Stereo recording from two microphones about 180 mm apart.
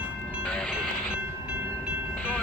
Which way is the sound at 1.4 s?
5° right (ahead or behind).